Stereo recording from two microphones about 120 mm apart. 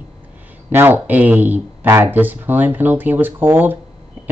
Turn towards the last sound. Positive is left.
turn(degrees=-15)  # may be behind; listen again after turning